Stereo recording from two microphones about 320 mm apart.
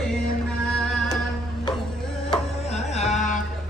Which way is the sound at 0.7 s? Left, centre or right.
Centre.